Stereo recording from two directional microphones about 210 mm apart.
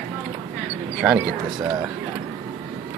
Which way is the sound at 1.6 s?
20° right (ahead or behind).